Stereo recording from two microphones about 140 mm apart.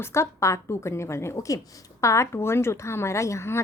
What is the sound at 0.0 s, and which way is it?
A woman's voice, 20° left (ahead or behind).